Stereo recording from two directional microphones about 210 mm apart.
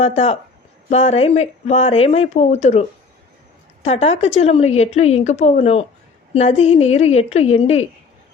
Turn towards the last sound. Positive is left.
turn(degrees=30)  # may be behind; listen again after turning